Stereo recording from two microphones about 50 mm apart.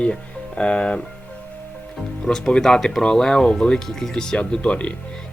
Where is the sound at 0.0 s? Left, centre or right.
Left.